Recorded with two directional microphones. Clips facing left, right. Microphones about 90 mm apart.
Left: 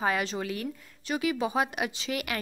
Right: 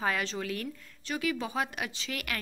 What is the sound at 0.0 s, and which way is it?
A woman's voice, 10° left (ahead or behind).